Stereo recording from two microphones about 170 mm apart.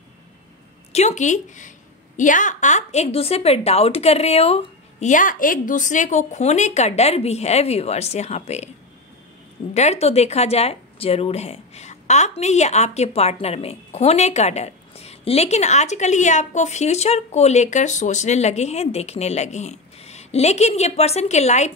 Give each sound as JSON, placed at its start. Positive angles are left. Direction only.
{"t": 0.9, "sound": "speech", "side_deg": 45}
{"t": 5.1, "sound": "speech", "side_deg": 50}
{"t": 9.8, "sound": "speech", "side_deg": 40}